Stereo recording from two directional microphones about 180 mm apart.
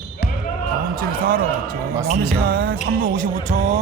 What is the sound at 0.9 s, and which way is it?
Music, 55° right (ahead or behind).